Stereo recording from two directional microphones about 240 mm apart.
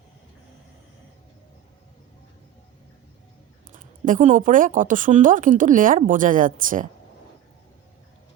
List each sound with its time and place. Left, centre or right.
3.7 s speech: right